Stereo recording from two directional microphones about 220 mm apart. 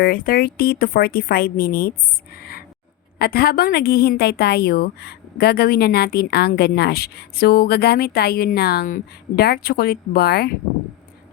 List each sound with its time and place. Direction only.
0.0 s a woman's voice: 45° left (ahead or behind)
2.3 s a sound: 45° left (ahead or behind)
3.2 s a woman's voice: 45° left (ahead or behind)